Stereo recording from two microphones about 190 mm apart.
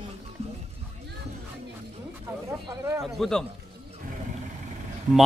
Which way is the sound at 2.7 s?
20° right (ahead or behind).